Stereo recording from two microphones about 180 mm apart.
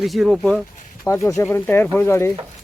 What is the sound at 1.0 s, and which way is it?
Speech, 15° left (ahead or behind).